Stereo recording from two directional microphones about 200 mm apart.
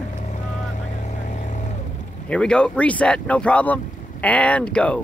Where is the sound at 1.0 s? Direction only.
40° left (ahead or behind).